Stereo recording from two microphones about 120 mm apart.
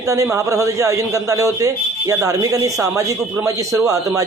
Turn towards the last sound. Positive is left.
turn(degrees=-30)  # may be behind; listen again after turning